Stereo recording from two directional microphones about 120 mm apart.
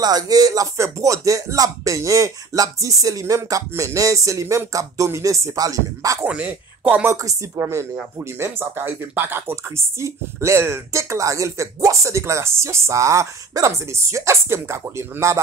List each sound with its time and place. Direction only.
0.0 s speech: 30° right (ahead or behind)
6.2 s speech: 10° right (ahead or behind)
7.2 s speech: 25° right (ahead or behind)